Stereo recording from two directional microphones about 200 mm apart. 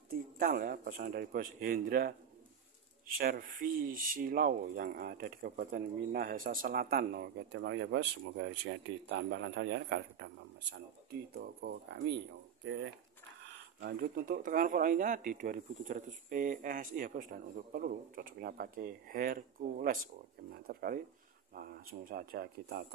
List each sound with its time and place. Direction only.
0.1 s speech: 45° right (ahead or behind); by 12.9 s 65° right (ahead or behind)
13.4 s speech: 50° right (ahead or behind)